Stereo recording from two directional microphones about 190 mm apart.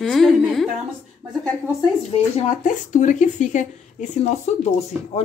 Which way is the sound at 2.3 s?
40° left (ahead or behind).